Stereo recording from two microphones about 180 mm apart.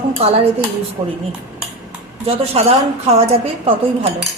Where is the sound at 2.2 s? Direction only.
35° right (ahead or behind).